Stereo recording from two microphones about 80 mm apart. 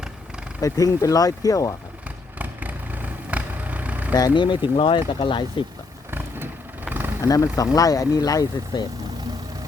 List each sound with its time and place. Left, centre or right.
0.6 s speech: left
2.4 s vehicle: centre
4.1 s speech: left
6.1 s vehicle: right
7.2 s speech: left